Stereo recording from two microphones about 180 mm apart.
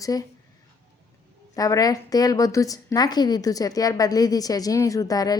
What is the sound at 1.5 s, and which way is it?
A woman's voice, 20° left (ahead or behind).